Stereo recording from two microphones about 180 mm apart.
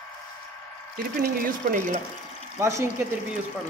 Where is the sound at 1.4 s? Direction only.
50° right (ahead or behind).